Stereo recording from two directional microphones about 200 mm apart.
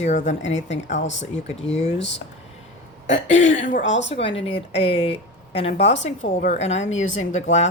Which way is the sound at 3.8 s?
65° left (ahead or behind).